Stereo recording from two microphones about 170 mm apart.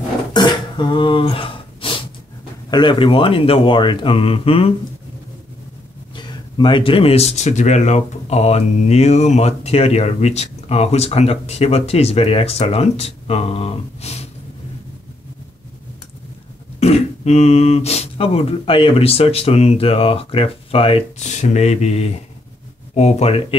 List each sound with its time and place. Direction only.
0.3 s throat clearing: 25° left (ahead or behind)
2.7 s speech: 30° left (ahead or behind)
6.1 s speech: 25° left (ahead or behind)
16.8 s speech: 40° left (ahead or behind)